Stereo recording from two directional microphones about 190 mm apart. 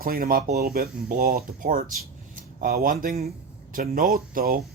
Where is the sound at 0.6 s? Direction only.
55° right (ahead or behind).